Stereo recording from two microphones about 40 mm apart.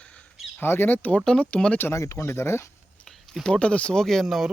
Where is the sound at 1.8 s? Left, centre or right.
Left.